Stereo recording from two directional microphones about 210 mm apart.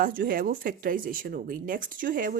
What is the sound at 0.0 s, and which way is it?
Speech, 40° right (ahead or behind).